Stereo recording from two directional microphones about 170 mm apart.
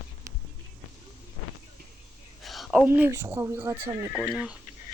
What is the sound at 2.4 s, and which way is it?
Speech, centre (ahead or behind).